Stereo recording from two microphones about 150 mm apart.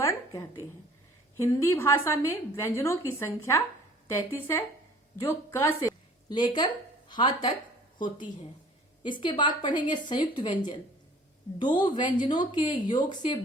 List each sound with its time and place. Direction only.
0.0 s a sound: 20° left (ahead or behind)
1.4 s a woman's voice: 15° left (ahead or behind)
9.0 s speech: 30° left (ahead or behind)
11.7 s speech: 30° left (ahead or behind)